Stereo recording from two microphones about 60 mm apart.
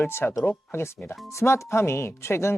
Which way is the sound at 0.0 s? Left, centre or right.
Left.